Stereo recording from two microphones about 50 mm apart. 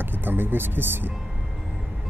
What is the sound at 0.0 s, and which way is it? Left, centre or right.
Speech, right.